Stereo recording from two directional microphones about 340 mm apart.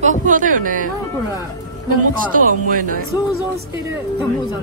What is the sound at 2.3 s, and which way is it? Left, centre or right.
Speech, right.